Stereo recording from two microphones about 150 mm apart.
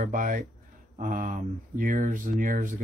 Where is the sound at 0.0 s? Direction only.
60° right (ahead or behind).